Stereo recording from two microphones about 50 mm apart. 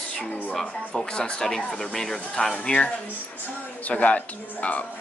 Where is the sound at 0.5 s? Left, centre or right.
Centre.